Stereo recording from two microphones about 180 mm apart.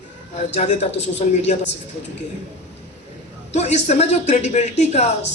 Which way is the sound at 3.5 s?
40° left (ahead or behind).